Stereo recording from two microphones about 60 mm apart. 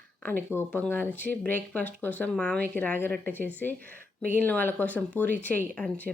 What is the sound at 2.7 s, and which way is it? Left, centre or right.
Speech, left.